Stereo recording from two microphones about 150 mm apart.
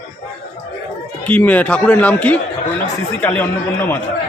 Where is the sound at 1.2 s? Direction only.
10° left (ahead or behind).